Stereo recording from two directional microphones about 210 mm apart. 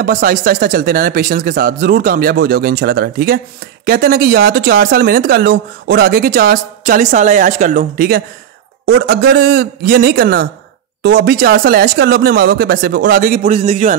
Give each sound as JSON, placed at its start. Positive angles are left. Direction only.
{"t": 0.0, "sound": "speech", "side_deg": -40}